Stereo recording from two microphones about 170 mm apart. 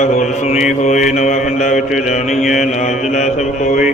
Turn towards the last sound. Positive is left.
turn(degrees=45)  # may be behind; listen again after turning